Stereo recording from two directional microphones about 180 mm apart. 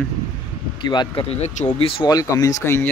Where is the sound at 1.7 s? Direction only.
30° left (ahead or behind); by 2.9 s 15° left (ahead or behind).